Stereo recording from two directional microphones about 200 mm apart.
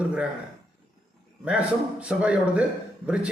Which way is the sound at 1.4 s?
5° right (ahead or behind).